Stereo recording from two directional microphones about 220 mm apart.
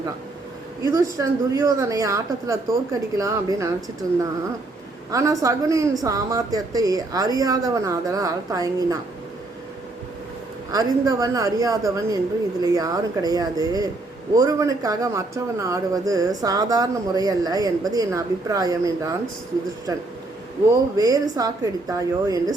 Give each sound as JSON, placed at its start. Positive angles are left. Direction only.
{"t": 0.8, "sound": "speech", "side_deg": -15}
{"t": 10.7, "sound": "speech", "side_deg": -15}